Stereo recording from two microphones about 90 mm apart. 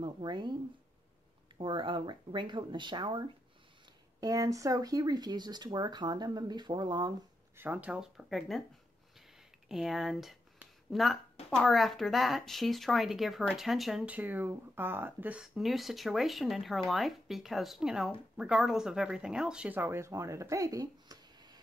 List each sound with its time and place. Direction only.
0.0 s speech: 55° right (ahead or behind)
1.6 s speech: 65° right (ahead or behind)
4.2 s speech: 40° right (ahead or behind)
7.5 s speech: 20° right (ahead or behind)
8.0 s speech: centre (ahead or behind)
9.7 s speech: 5° right (ahead or behind)
14.0 s speech: 20° right (ahead or behind)
15.4 s speech: centre (ahead or behind)
19.7 s speech: 25° right (ahead or behind); by 21.5 s 50° right (ahead or behind)